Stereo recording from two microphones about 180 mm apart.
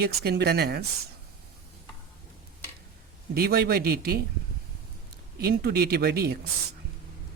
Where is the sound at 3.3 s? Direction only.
60° right (ahead or behind).